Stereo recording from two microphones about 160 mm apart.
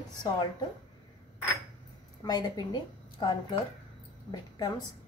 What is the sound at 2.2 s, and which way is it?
A woman's voice, 25° left (ahead or behind).